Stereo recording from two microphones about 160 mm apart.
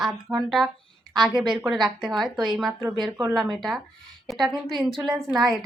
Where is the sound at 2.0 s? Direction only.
Centre (ahead or behind).